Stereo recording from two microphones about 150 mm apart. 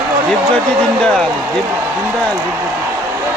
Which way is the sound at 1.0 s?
5° left (ahead or behind).